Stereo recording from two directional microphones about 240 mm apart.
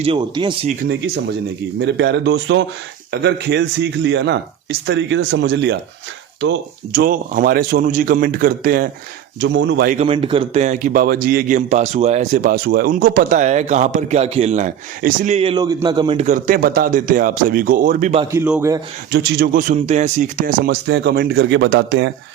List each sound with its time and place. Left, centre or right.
0.0 s speech: centre
0.9 s a man's voice: right
9.9 s a man's voice: right
18.2 s a man's voice: centre
19.1 s a man's voice: right
20.8 s speech: right